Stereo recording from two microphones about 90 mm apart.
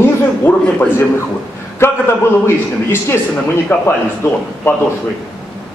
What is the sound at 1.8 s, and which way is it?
A man's voice, 25° left (ahead or behind).